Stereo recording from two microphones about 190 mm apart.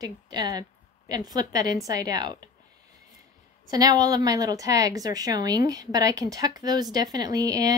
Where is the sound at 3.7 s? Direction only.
20° right (ahead or behind).